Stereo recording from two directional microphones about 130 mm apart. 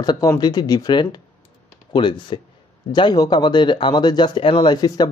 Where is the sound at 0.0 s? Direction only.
35° left (ahead or behind).